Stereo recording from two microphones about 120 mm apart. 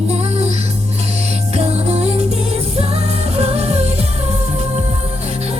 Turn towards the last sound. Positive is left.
turn(degrees=-60)  # may be behind; listen again after turning